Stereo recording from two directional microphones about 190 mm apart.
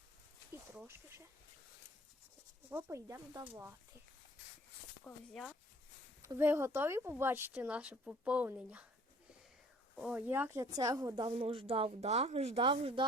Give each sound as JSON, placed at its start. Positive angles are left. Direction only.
{"t": 0.5, "sound": "a sound", "side_deg": -10}
{"t": 2.6, "sound": "speech", "side_deg": -15}
{"t": 5.0, "sound": "speech", "side_deg": 5}
{"t": 6.2, "sound": "speech", "side_deg": -15}
{"t": 9.9, "sound": "speech", "side_deg": -5}
{"t": 11.3, "sound": "a woman's voice", "side_deg": -30}